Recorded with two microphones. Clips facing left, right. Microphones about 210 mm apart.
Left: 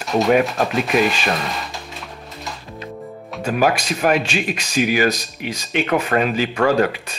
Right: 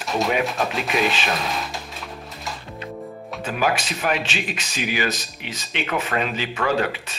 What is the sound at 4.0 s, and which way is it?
Speech, 45° left (ahead or behind).